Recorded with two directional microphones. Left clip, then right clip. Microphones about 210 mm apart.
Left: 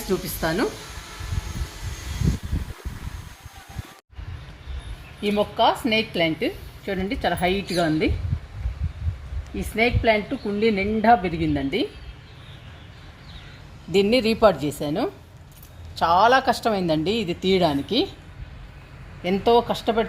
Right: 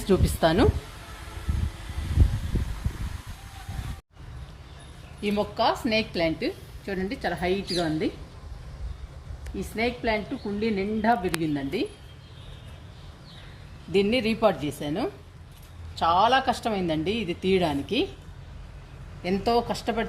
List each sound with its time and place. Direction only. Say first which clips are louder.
0.1 s speech: right 3 dB; 55° right (ahead or behind)
5.2 s a woman's voice: left 5 dB; 35° left (ahead or behind)
9.7 s a woman's voice: left 7 dB; 40° left (ahead or behind)
13.9 s a woman's voice: left 4 dB; 40° left (ahead or behind)
19.2 s a woman's voice: left 6 dB; 40° left (ahead or behind)